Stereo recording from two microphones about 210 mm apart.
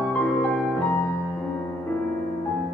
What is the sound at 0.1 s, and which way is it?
Music, 5° left (ahead or behind).